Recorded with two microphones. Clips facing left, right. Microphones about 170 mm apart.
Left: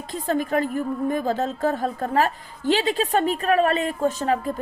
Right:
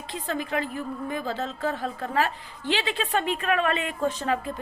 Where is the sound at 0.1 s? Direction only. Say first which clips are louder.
Left 6 dB; 45° left (ahead or behind).